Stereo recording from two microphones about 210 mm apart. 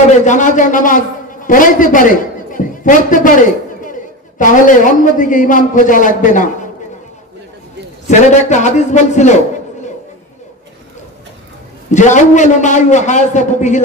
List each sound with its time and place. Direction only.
0.2 s a man's voice: 35° left (ahead or behind)
8.1 s a man's voice: 35° left (ahead or behind)
11.9 s a man's voice: 35° left (ahead or behind)